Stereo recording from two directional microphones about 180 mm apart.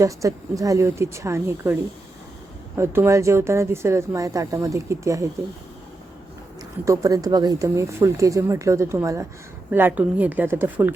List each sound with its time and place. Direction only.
0.0 s speech: 20° right (ahead or behind)
6.8 s speech: 15° right (ahead or behind)